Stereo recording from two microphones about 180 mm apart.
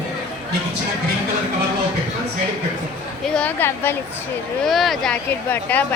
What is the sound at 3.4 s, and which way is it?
Speech, 10° left (ahead or behind).